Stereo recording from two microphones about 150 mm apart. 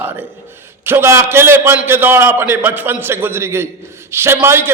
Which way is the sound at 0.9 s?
15° right (ahead or behind).